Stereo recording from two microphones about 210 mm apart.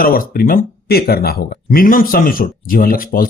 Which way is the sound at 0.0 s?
45° left (ahead or behind).